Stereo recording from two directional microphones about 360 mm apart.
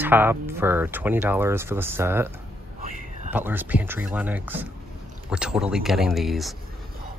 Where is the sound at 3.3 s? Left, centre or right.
Centre.